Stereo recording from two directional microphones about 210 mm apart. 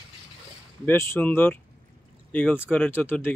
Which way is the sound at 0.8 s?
10° left (ahead or behind).